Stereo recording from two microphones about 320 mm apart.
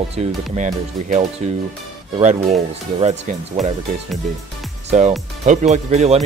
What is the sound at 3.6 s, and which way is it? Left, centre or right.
Speech, centre.